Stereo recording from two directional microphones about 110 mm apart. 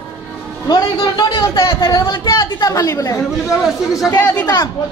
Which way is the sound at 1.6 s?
25° left (ahead or behind).